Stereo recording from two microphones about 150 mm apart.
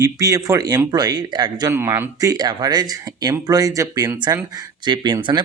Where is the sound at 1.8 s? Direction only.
15° right (ahead or behind).